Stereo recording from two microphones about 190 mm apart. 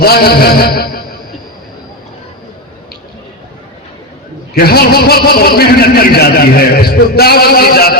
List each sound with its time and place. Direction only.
0.0 s music: 55° left (ahead or behind)
4.5 s speech: 55° left (ahead or behind)